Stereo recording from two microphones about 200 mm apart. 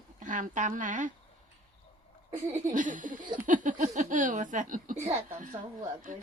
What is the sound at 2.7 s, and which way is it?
A woman's voice, 40° right (ahead or behind).